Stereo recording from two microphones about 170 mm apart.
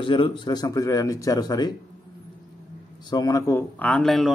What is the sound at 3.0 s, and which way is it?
Speech, 20° left (ahead or behind).